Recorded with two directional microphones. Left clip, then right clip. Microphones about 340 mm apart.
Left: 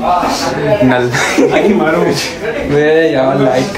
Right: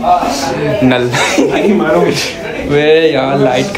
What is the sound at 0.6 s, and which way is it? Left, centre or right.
A man's voice, centre.